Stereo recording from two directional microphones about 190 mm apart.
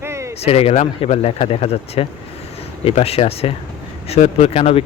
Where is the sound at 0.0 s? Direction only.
15° right (ahead or behind).